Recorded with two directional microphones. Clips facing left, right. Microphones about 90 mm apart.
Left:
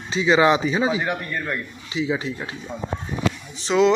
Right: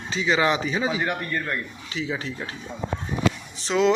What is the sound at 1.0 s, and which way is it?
Speech, 10° left (ahead or behind).